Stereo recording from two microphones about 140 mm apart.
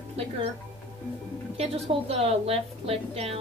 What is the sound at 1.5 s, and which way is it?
A woman's voice, 45° right (ahead or behind).